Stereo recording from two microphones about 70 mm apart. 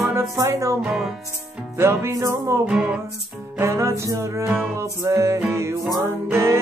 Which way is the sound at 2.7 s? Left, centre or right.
Centre.